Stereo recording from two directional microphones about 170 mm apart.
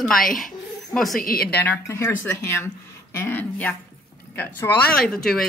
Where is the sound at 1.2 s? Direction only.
60° left (ahead or behind).